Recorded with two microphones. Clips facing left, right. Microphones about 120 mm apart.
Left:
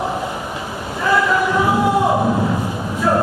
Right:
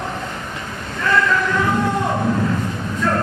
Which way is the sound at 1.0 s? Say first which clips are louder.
Left 2 dB; 15° left (ahead or behind).